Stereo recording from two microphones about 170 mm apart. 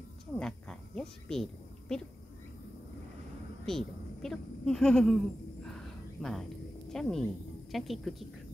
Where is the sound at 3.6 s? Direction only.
Centre (ahead or behind).